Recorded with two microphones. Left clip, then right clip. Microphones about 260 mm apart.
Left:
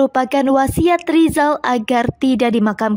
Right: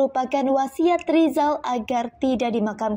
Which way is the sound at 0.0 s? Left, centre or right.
Left.